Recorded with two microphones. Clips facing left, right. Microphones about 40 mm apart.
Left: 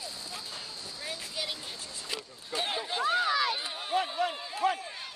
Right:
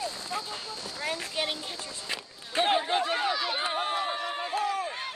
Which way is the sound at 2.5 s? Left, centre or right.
Right.